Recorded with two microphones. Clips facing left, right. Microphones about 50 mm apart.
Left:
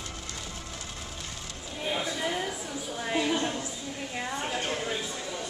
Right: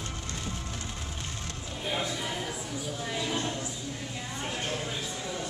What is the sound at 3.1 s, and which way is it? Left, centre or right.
Speech, left.